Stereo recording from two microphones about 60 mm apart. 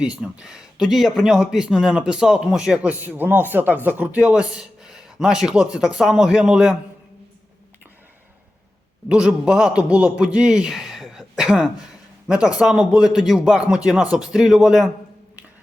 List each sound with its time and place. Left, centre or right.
0.0 s a man's voice: centre
2.7 s speech: right
9.0 s a man's voice: centre